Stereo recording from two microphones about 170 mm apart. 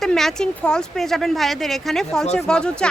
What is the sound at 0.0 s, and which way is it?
Speech, centre (ahead or behind).